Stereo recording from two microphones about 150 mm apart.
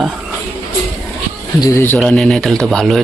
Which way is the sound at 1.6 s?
15° left (ahead or behind).